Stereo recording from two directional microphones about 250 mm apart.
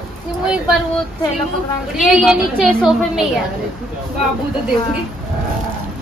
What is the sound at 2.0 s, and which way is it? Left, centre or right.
A woman's voice, centre.